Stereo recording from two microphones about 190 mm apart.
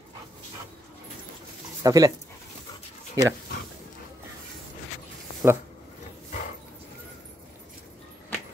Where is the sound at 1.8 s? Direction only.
20° right (ahead or behind).